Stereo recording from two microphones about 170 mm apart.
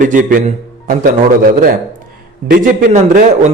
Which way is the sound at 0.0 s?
50° right (ahead or behind).